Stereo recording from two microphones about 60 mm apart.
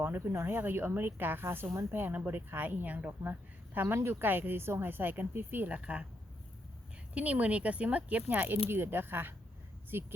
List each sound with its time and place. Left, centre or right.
0.0 s speech: right
7.1 s speech: right